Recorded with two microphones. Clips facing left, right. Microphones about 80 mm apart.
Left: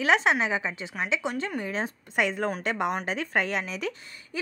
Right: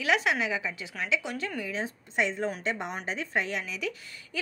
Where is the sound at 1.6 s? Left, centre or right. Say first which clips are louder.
Left 3 dB; left.